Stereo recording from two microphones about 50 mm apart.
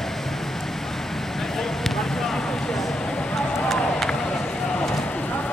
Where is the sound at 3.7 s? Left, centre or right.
Centre.